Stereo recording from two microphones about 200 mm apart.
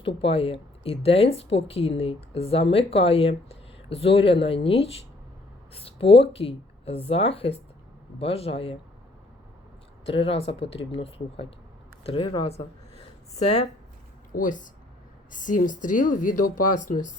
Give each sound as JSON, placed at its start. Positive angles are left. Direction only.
{"t": 0.0, "sound": "speech", "side_deg": 30}
{"t": 10.1, "sound": "a woman's voice", "side_deg": 30}